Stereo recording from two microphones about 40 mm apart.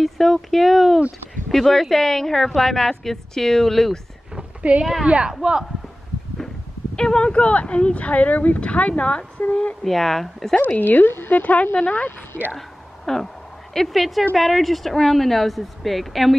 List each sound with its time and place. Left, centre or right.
0.0 s a woman's voice: centre
4.7 s a woman's voice: right
7.0 s speech: left
9.8 s a woman's voice: centre
10.8 s speech: left
11.2 s speech: left
12.5 s a sound: centre
13.7 s speech: centre